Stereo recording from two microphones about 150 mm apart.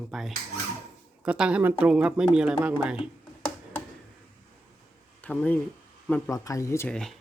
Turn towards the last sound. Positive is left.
turn(degrees=5)  # may be behind; listen again after turning